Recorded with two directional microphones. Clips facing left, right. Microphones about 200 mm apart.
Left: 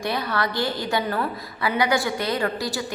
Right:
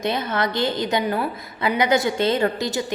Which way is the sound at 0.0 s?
20° right (ahead or behind).